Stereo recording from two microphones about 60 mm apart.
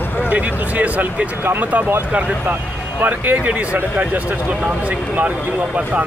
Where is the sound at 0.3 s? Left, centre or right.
Right.